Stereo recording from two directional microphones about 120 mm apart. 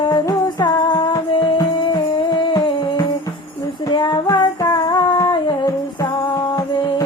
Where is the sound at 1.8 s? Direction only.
40° left (ahead or behind).